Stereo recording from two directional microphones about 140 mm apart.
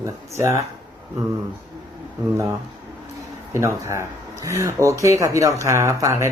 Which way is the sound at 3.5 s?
20° right (ahead or behind).